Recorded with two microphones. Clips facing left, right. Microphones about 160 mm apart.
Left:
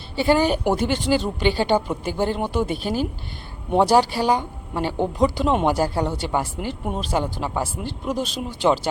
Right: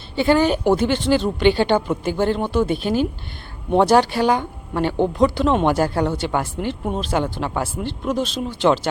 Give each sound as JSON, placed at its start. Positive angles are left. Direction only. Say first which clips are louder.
{"t": 0.3, "sound": "speech", "louder": "right 2 dB", "side_deg": 10}
{"t": 2.7, "sound": "speech", "louder": "right 4 dB", "side_deg": 40}
{"t": 3.7, "sound": "speech", "louder": "right 2 dB", "side_deg": 10}